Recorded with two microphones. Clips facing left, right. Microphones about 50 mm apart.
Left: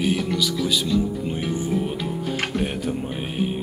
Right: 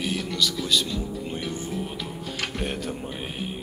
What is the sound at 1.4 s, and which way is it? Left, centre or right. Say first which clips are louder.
Music: left 6 dB; centre.